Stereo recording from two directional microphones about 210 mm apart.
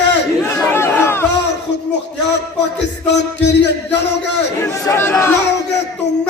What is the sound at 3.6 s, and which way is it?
Music, 55° left (ahead or behind).